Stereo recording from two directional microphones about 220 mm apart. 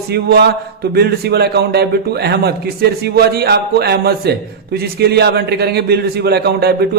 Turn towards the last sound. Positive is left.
turn(degrees=-45)  # may be behind; listen again after turning